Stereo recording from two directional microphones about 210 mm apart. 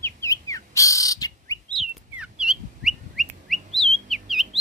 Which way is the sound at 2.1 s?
5° right (ahead or behind).